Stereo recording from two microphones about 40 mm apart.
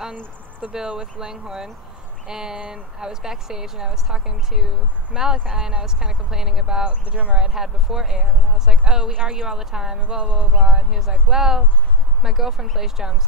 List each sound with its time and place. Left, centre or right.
0.7 s speech: centre
6.9 s speech: right
7.3 s speech: centre
9.9 s speech: right
10.6 s speech: centre